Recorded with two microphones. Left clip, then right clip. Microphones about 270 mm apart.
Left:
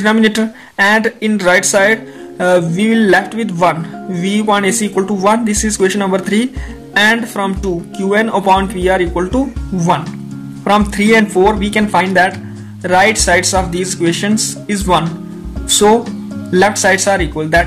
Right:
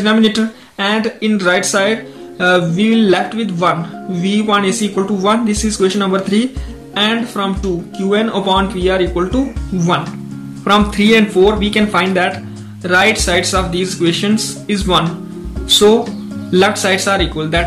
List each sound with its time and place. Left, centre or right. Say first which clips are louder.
0.0 s speech: left 1 dB; left
16.5 s speech: left 2 dB; left